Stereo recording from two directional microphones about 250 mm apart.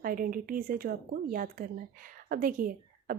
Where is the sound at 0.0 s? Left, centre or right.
Right.